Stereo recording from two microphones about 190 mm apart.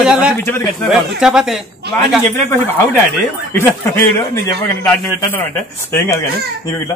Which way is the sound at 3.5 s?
10° left (ahead or behind).